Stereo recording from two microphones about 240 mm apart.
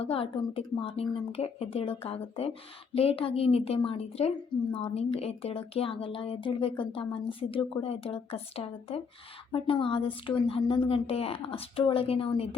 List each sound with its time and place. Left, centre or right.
0.0 s speech: left